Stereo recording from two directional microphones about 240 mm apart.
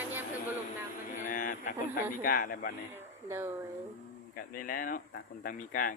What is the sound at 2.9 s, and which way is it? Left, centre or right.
Speech, centre.